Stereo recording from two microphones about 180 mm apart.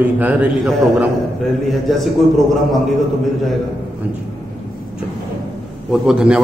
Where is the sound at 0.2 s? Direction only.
10° right (ahead or behind).